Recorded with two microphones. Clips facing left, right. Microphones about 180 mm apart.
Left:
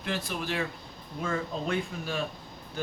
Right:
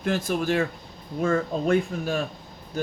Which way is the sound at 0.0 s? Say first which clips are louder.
Right 8 dB; 45° right (ahead or behind).